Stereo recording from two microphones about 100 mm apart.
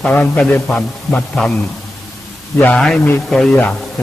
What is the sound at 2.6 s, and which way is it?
A man's voice, 15° left (ahead or behind).